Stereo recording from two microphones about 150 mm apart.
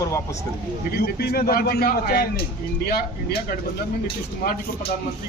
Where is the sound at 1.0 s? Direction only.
90° left.